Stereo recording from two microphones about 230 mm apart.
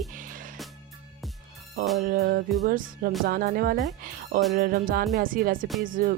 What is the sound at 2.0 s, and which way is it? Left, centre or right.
Speech, right.